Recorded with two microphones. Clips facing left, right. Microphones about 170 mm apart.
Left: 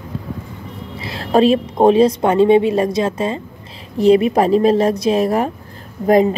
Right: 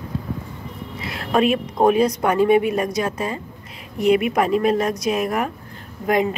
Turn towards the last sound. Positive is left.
turn(degrees=35)  # may be behind; listen again after turning